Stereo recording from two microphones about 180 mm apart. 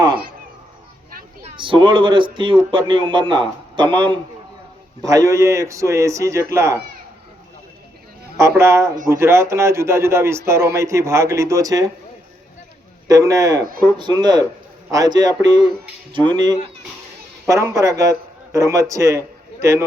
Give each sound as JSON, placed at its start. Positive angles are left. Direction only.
{"t": 1.5, "sound": "a man's voice", "side_deg": -30}
{"t": 8.4, "sound": "a man's voice", "side_deg": -15}
{"t": 13.1, "sound": "a man's voice", "side_deg": -20}